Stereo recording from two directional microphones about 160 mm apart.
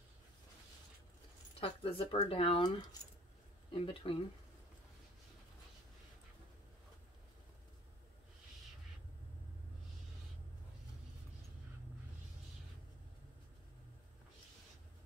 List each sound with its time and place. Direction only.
1.6 s speech: 35° left (ahead or behind)